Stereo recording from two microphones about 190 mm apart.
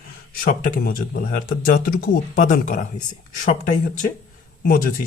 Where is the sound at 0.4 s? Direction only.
45° left (ahead or behind).